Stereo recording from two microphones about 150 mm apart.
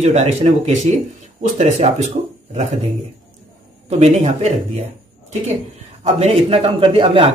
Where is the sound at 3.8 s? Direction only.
45° right (ahead or behind).